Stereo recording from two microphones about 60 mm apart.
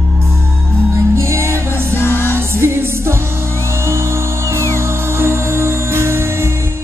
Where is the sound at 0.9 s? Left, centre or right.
Right.